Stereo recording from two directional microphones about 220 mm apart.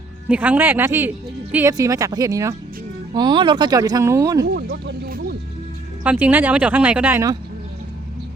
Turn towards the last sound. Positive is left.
turn(degrees=-10)  # may be behind; listen again after turning